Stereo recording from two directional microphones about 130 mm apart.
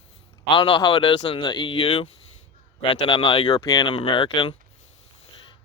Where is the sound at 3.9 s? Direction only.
40° left (ahead or behind).